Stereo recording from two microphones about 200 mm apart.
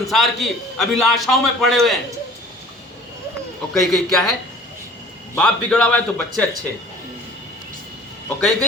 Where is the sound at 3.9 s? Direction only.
Centre (ahead or behind).